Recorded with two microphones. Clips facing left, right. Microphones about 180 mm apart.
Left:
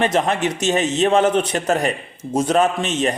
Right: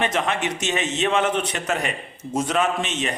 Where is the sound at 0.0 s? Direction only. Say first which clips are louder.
Left 5 dB; 35° left (ahead or behind).